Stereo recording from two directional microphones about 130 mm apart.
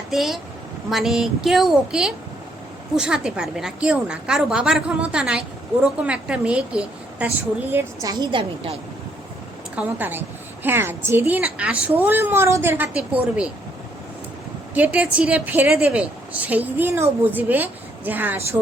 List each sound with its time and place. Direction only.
0.1 s a woman's voice: centre (ahead or behind); by 8.1 s 20° right (ahead or behind)
8.2 s a woman's voice: 40° right (ahead or behind)
9.7 s a woman's voice: 15° right (ahead or behind)
14.8 s a woman's voice: 10° right (ahead or behind)